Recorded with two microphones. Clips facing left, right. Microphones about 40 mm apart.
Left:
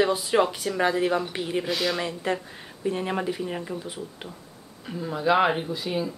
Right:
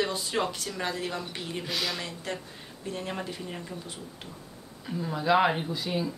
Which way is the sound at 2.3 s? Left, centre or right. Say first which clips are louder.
Left 8 dB; left.